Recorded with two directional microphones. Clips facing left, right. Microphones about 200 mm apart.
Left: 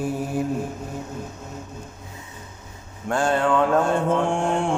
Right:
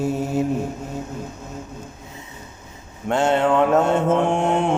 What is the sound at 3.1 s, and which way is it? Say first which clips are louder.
Mantra: right 3 dB; 25° right (ahead or behind).